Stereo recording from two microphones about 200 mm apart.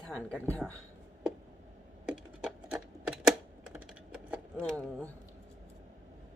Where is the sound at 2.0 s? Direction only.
5° right (ahead or behind).